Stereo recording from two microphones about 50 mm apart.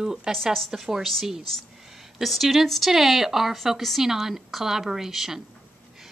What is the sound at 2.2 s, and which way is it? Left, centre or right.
A woman's voice, centre.